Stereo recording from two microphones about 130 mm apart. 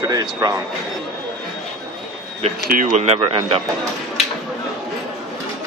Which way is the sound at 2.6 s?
90° right.